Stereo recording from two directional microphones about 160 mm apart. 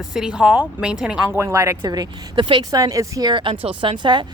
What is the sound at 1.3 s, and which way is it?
Speech, 15° right (ahead or behind).